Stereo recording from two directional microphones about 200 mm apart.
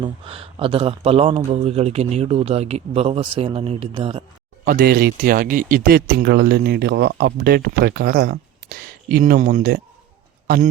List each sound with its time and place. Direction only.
0.0 s a man's voice: 30° right (ahead or behind)
4.6 s a man's voice: 45° right (ahead or behind)